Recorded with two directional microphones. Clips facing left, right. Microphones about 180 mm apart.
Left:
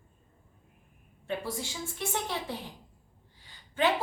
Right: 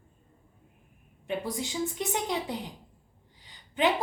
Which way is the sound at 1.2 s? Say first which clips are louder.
Right 2 dB; 20° right (ahead or behind).